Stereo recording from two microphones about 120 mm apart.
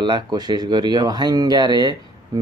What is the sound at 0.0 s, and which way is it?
Speech, 35° right (ahead or behind).